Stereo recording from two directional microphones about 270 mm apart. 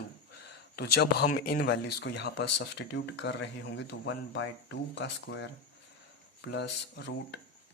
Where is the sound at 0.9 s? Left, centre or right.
Left.